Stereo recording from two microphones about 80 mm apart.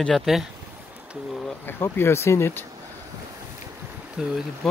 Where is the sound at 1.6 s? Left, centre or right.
Left.